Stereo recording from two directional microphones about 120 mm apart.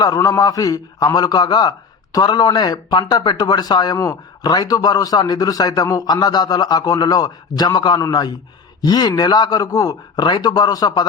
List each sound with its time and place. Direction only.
0.0 s a man's voice: 30° left (ahead or behind)